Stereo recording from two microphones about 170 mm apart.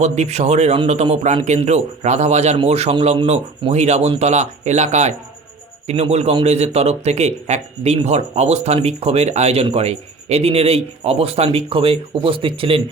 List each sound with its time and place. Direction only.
0.0 s a man's voice: 40° right (ahead or behind)